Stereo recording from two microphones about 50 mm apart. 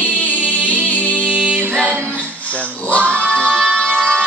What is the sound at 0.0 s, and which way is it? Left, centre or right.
Music, left.